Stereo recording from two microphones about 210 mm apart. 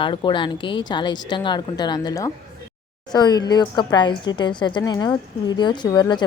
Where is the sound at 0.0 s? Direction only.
20° left (ahead or behind).